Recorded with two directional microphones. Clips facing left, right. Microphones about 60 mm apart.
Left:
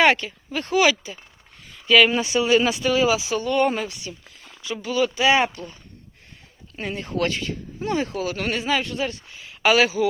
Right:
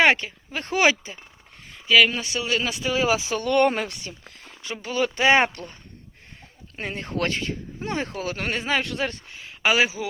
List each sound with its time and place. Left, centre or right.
0.0 s speech: right
1.9 s speech: centre
2.1 s speech: centre
2.9 s speech: right
3.5 s speech: right
6.7 s speech: right
8.8 s speech: right
9.6 s speech: right